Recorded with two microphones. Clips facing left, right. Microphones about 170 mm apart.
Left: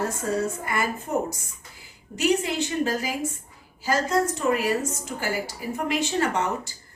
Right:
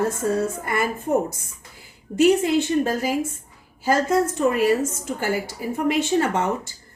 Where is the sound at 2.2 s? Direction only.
50° right (ahead or behind).